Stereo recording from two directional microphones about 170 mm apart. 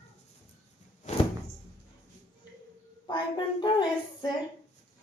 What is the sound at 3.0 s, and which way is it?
A woman's voice, 25° left (ahead or behind).